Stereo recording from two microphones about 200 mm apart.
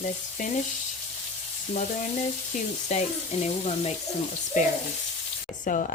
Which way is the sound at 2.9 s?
35° left (ahead or behind).